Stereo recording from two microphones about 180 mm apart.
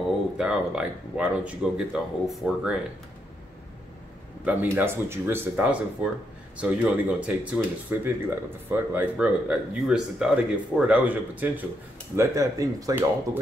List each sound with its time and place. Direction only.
0.4 s speech: 5° right (ahead or behind)
4.5 s speech: 10° right (ahead or behind)